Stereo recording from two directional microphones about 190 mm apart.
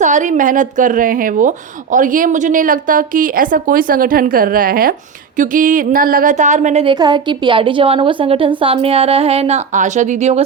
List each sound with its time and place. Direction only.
0.0 s a woman's voice: 40° right (ahead or behind)
6.8 s a woman's voice: 25° right (ahead or behind)